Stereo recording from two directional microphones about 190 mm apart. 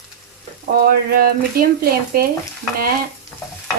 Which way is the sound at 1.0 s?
50° right (ahead or behind).